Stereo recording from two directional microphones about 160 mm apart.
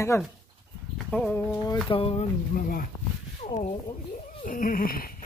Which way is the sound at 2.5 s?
60° left (ahead or behind).